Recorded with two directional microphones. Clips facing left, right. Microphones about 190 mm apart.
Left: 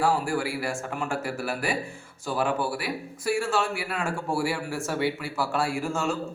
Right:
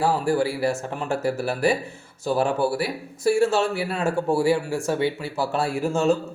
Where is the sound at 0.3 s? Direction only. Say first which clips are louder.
Right 6 dB; 25° right (ahead or behind).